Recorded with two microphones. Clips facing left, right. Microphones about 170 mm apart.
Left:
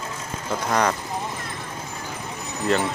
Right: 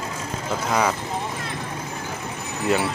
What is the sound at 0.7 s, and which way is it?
Speech, 5° right (ahead or behind).